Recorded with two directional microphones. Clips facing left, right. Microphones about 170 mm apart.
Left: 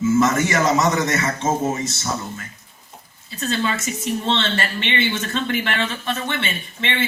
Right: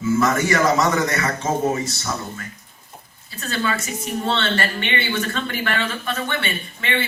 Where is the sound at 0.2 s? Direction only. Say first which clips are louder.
Even; 25° left (ahead or behind).